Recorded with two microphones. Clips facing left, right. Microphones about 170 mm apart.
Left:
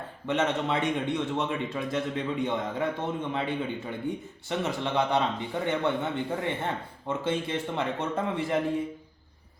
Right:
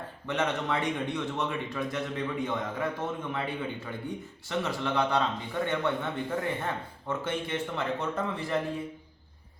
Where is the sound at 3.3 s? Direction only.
25° left (ahead or behind).